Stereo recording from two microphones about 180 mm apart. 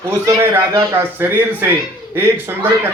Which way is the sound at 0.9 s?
10° right (ahead or behind).